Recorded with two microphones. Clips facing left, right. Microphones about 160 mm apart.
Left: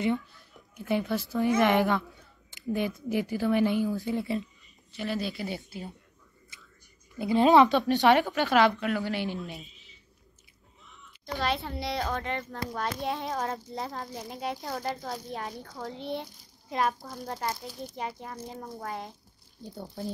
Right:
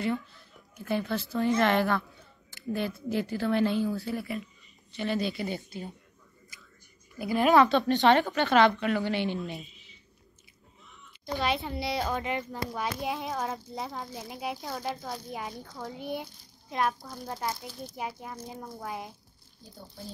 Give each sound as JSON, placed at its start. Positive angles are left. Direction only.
{"t": 0.7, "sound": "speech", "side_deg": 15}
{"t": 4.9, "sound": "speech", "side_deg": 0}
{"t": 7.2, "sound": "speech", "side_deg": 20}
{"t": 11.3, "sound": "speech", "side_deg": 0}